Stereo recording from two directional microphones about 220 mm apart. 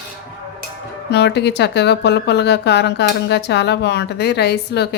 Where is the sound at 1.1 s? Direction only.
50° left (ahead or behind).